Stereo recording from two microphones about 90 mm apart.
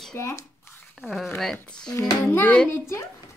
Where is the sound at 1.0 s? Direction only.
Centre (ahead or behind).